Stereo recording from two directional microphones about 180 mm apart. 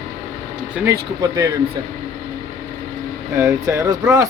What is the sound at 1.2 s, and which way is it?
Speech, 20° right (ahead or behind).